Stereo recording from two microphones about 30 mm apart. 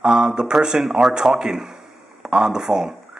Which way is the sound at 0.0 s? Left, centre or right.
Right.